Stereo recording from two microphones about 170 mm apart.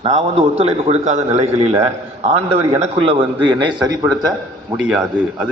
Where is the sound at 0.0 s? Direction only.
35° right (ahead or behind).